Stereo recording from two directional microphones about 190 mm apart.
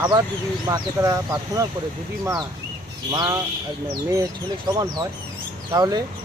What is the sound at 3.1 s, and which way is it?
Speech, 20° right (ahead or behind).